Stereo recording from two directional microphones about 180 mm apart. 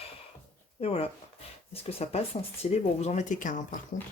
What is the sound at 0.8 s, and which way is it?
Speech, 35° left (ahead or behind).